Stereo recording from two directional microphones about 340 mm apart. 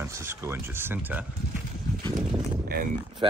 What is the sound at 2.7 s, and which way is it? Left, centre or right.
Speech, right.